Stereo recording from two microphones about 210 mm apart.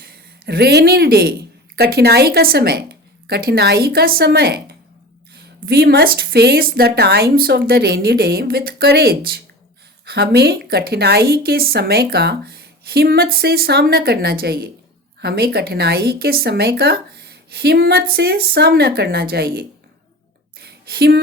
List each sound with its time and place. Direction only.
0.0 s speech: 50° right (ahead or behind)
5.6 s a woman's voice: 50° right (ahead or behind)
20.6 s a sound: 50° right (ahead or behind)